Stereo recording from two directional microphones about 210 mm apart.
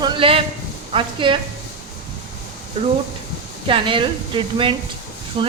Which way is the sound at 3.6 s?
25° right (ahead or behind).